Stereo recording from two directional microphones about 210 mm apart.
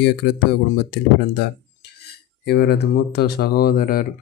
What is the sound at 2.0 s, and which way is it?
Speech, 50° left (ahead or behind).